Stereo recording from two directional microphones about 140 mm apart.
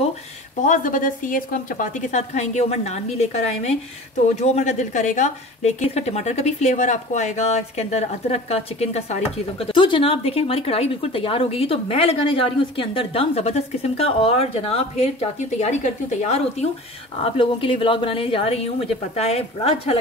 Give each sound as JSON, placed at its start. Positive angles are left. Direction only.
{"t": 0.7, "sound": "a woman's voice", "side_deg": 70}
{"t": 4.4, "sound": "a woman's voice", "side_deg": 55}
{"t": 17.2, "sound": "a woman's voice", "side_deg": 40}